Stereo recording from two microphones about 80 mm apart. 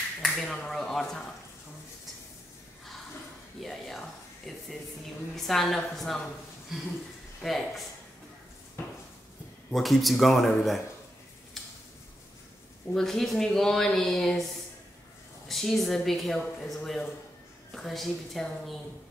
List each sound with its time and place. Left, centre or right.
0.2 s speech: centre
3.6 s speech: centre
9.7 s speech: centre
12.9 s speech: centre
15.4 s speech: centre